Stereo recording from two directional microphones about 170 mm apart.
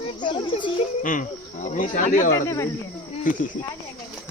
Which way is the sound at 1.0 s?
50° left (ahead or behind).